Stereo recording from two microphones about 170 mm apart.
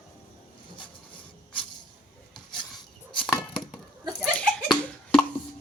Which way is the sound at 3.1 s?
30° left (ahead or behind).